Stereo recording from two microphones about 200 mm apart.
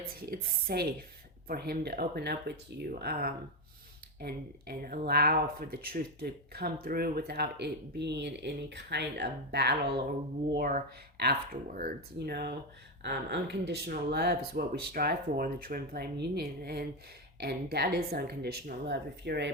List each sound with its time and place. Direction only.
0.0 s speech: 50° right (ahead or behind)